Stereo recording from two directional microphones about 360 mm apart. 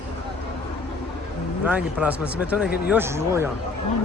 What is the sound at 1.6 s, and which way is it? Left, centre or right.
Speech, centre.